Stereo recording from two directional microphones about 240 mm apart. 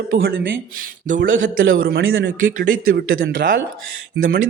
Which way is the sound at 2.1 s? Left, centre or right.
Right.